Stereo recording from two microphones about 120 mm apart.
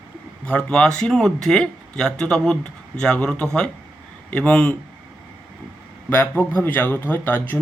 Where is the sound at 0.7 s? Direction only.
5° left (ahead or behind).